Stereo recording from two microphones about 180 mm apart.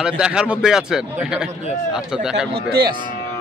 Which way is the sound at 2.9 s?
25° right (ahead or behind).